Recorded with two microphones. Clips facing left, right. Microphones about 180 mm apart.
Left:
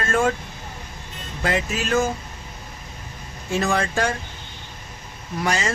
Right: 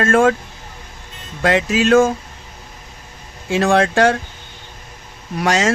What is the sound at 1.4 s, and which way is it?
Speech, 90° right.